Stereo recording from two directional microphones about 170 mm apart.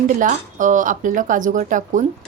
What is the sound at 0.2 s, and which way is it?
Speech, 50° right (ahead or behind).